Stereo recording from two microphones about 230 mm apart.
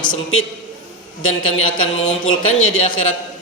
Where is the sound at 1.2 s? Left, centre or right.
Left.